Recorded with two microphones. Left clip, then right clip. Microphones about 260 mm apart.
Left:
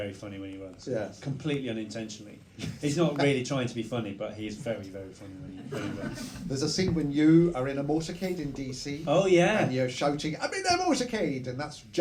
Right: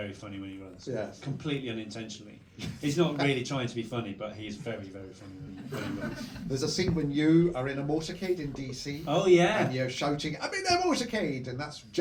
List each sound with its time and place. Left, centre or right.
0.9 s speech: left
6.2 s speech: left